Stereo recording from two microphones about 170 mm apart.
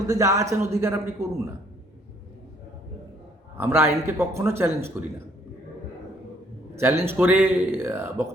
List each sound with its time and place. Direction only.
0.1 s a man's voice: 20° right (ahead or behind)
3.6 s a man's voice: 15° right (ahead or behind)
6.7 s a man's voice: 15° right (ahead or behind)